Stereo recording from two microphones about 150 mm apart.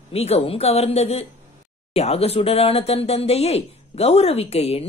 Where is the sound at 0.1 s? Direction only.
45° left (ahead or behind).